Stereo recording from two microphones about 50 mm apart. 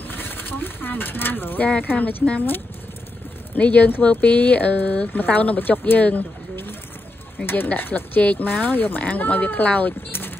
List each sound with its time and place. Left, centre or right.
0.1 s speech: left
1.6 s speech: left
3.5 s speech: left
7.4 s speech: left